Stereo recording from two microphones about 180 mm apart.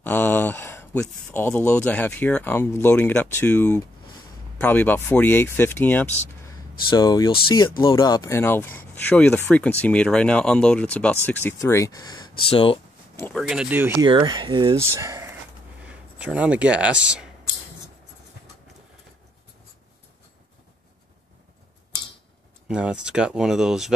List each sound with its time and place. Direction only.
0.0 s speech: 10° left (ahead or behind)
6.9 s speech: 20° left (ahead or behind)
11.6 s speech: 20° left (ahead or behind)
13.4 s speech: 5° right (ahead or behind)
14.0 s speech: 25° right (ahead or behind); by 17.3 s 5° right (ahead or behind)
22.7 s speech: 5° right (ahead or behind)